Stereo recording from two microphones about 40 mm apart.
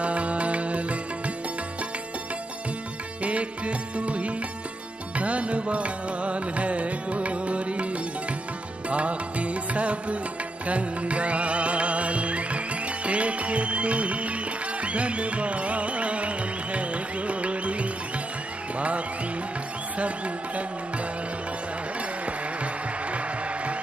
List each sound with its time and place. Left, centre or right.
0.0 s music: right
3.2 s music: right
8.9 s music: right